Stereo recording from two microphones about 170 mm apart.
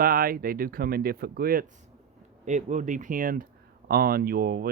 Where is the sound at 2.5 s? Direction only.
45° right (ahead or behind).